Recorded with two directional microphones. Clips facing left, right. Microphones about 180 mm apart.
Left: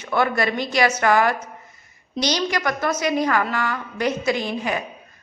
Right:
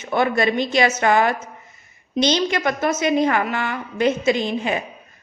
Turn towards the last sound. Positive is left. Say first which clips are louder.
# right 2 dB
turn(degrees=-20)  # may be behind; listen again after turning